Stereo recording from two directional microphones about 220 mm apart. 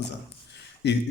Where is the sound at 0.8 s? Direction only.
50° left (ahead or behind).